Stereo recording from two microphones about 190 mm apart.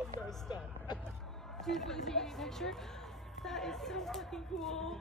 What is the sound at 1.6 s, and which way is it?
Speech, centre (ahead or behind).